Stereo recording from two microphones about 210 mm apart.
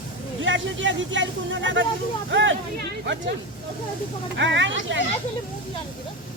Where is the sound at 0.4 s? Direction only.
60° right (ahead or behind).